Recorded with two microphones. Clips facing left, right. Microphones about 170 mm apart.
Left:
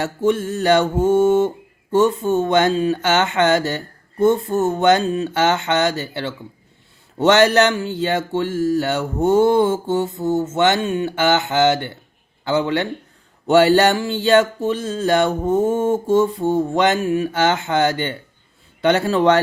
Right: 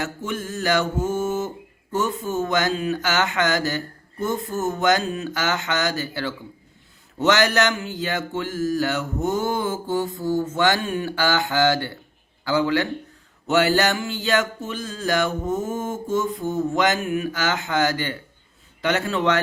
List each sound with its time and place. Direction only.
0.0 s mantra: 30° left (ahead or behind)
18.8 s a man's voice: 30° left (ahead or behind)